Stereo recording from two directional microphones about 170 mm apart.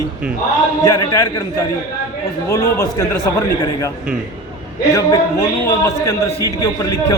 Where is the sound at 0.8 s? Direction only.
15° left (ahead or behind).